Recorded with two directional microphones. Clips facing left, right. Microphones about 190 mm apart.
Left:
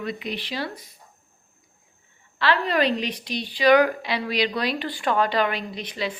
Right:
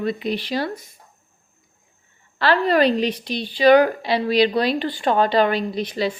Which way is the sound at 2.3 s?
40° right (ahead or behind).